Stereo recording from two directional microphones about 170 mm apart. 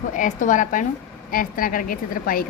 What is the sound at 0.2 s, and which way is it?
A woman's voice, 50° left (ahead or behind).